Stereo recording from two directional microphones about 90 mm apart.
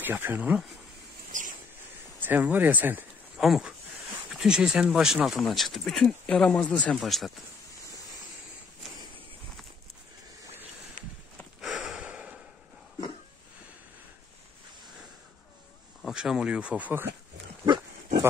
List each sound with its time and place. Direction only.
0.0 s speech: 25° right (ahead or behind)
2.1 s speech: 20° right (ahead or behind)
3.3 s speech: 5° right (ahead or behind); by 7.0 s 10° left (ahead or behind)
7.0 s speech: centre (ahead or behind)
11.6 s sniff: 5° right (ahead or behind)
16.0 s speech: 5° right (ahead or behind); by 17.1 s 20° right (ahead or behind)